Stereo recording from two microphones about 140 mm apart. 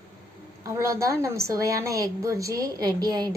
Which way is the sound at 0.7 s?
25° right (ahead or behind).